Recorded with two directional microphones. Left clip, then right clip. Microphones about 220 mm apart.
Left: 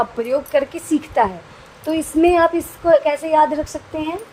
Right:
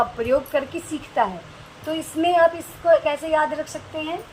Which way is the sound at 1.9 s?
50° left (ahead or behind).